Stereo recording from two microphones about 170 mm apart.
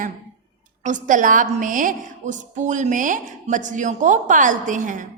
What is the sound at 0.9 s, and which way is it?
A woman's voice, 50° right (ahead or behind).